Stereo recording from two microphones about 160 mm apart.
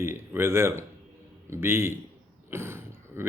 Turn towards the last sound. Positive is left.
turn(degrees=-15)  # may be behind; listen again after turning